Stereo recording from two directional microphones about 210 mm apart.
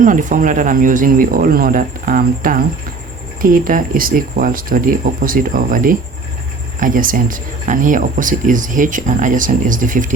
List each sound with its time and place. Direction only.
0.0 s speech: 40° right (ahead or behind)